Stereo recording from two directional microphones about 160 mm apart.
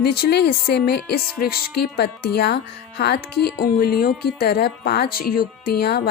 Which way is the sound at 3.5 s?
75° left (ahead or behind).